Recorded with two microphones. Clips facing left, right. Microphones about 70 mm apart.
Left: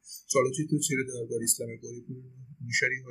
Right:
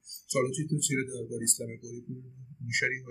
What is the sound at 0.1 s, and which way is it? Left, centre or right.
Speech, centre.